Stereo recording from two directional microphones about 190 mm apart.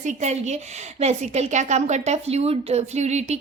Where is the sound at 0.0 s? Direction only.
40° right (ahead or behind).